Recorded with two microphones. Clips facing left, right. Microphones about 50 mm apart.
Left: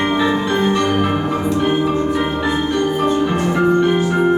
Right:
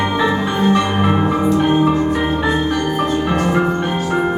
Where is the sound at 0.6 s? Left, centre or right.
Centre.